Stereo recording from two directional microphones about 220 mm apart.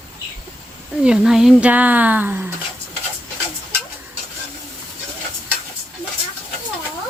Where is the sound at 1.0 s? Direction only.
5° right (ahead or behind).